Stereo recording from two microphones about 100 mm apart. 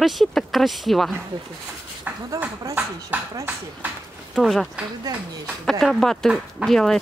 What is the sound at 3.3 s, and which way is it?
Speech, 20° right (ahead or behind).